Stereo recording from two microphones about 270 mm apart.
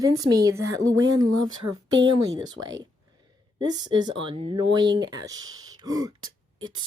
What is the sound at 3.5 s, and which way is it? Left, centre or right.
A woman's voice, centre.